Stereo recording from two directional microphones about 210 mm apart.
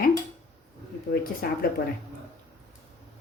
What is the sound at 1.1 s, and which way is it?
Speech, 45° left (ahead or behind).